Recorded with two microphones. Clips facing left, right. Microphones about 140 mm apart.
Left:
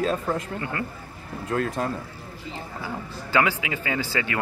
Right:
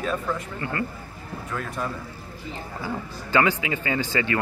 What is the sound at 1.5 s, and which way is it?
Speech, 50° left (ahead or behind).